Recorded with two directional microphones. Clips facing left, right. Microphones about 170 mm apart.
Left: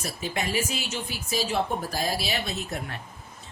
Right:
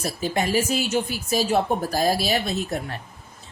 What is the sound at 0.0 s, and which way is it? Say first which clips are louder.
Speech: right 6 dB; 40° right (ahead or behind).